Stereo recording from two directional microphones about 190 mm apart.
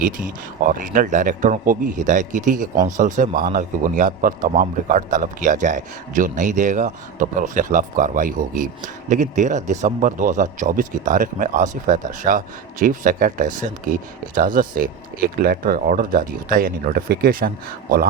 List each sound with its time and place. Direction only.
0.0 s speech: 45° right (ahead or behind)